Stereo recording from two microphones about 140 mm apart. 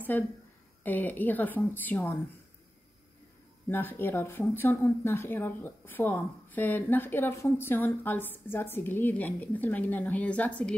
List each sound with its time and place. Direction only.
0.1 s speech: 15° left (ahead or behind)
3.6 s speech: 15° left (ahead or behind)